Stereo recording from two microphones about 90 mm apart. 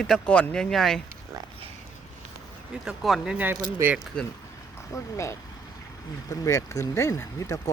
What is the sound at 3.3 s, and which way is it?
Speech, 20° right (ahead or behind).